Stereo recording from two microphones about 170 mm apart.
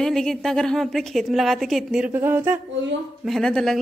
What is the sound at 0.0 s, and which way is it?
A woman's voice, 5° left (ahead or behind).